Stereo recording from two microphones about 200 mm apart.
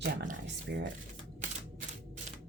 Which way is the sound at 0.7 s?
60° right (ahead or behind).